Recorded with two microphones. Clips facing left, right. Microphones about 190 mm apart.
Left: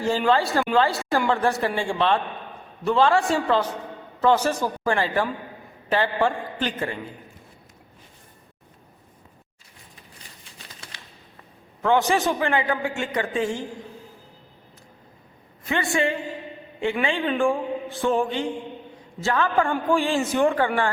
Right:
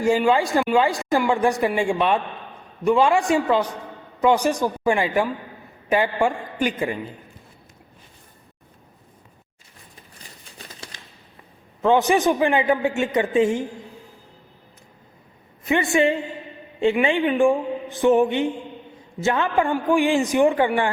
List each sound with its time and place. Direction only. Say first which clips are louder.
0.0 s a woman's voice: right 3 dB; 10° right (ahead or behind)
11.8 s a woman's voice: right 3 dB; 20° right (ahead or behind)
15.6 s a woman's voice: right 5 dB; 20° right (ahead or behind)